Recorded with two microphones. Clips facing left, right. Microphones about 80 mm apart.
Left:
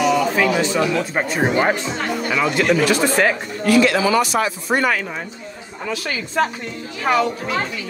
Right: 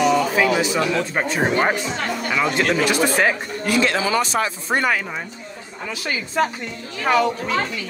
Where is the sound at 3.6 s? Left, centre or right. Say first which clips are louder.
Left 5 dB; right.